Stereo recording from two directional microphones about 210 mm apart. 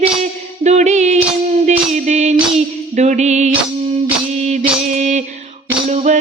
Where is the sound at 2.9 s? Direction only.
35° right (ahead or behind).